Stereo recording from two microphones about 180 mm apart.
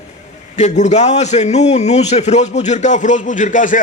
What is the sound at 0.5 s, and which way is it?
A man's voice, 40° left (ahead or behind).